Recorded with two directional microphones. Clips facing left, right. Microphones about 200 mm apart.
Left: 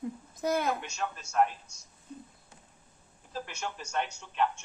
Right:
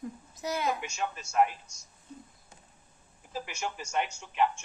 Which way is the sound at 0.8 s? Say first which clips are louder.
Right 1 dB; 10° right (ahead or behind).